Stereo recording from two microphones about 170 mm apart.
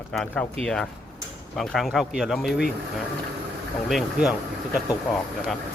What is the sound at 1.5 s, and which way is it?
Speech, centre (ahead or behind).